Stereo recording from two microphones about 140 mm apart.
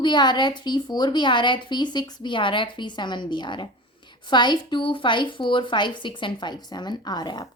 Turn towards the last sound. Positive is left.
turn(degrees=30)  # may be behind; listen again after turning